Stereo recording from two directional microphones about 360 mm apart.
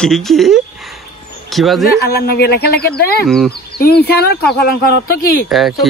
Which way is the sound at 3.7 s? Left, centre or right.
Left.